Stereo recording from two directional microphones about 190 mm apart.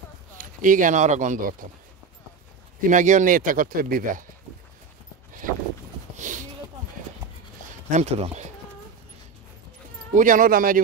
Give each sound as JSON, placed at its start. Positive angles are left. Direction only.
{"t": 0.4, "sound": "speech", "side_deg": -45}
{"t": 2.9, "sound": "speech", "side_deg": -40}
{"t": 5.4, "sound": "clip-clop", "side_deg": -45}
{"t": 6.1, "sound": "a sound", "side_deg": -40}
{"t": 7.9, "sound": "speech", "side_deg": -35}
{"t": 10.1, "sound": "speech", "side_deg": -45}